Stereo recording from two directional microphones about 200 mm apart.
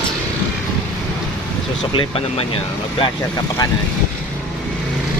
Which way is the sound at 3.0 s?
20° left (ahead or behind).